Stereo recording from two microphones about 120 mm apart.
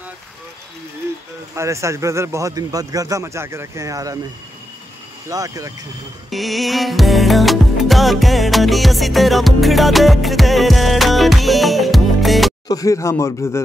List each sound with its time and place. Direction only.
1.5 s a man's voice: 25° right (ahead or behind)
5.3 s a man's voice: 30° right (ahead or behind)
6.3 s music: centre (ahead or behind)
12.6 s speech: 30° left (ahead or behind)